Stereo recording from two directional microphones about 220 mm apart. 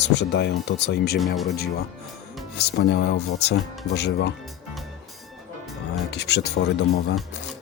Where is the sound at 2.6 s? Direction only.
50° left (ahead or behind).